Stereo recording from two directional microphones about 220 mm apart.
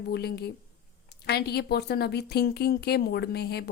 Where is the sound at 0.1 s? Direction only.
45° left (ahead or behind).